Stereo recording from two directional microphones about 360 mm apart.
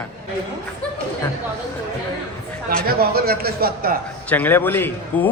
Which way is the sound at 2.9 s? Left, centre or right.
Right.